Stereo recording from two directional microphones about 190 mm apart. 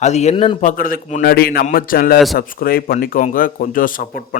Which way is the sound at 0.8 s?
50° left (ahead or behind).